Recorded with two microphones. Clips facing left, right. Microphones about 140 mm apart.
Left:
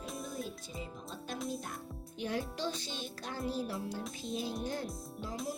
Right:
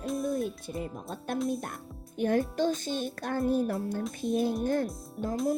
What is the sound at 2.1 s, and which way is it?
A child's voice, 50° right (ahead or behind).